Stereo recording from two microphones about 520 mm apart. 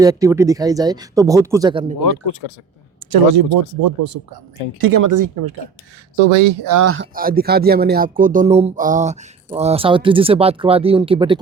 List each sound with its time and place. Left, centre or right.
0.0 s speech: centre
2.4 s speech: left
3.1 s speech: right
6.1 s speech: right
6.7 s speech: right; by 11.3 s centre